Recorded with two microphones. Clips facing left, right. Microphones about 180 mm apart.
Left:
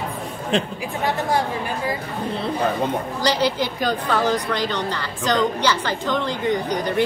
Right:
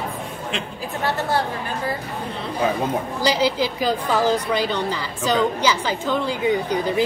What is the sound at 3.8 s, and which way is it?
A woman's voice, 5° right (ahead or behind).